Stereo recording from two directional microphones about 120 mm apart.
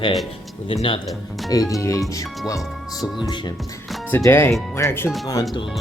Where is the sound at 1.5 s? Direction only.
30° left (ahead or behind).